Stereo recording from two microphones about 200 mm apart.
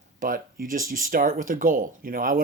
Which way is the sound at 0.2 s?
45° right (ahead or behind).